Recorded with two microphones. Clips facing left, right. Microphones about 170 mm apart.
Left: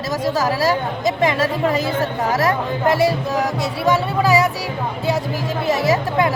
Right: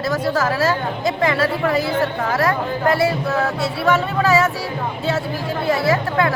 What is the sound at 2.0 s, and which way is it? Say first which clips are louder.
Speech: left 1 dB; 40° left (ahead or behind).